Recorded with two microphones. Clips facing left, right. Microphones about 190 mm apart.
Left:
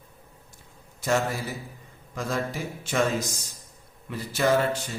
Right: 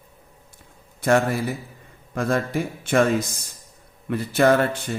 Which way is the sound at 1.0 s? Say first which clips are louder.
Right 6 dB; 60° right (ahead or behind).